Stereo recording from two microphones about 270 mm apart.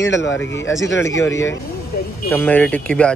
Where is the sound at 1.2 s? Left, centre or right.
Centre.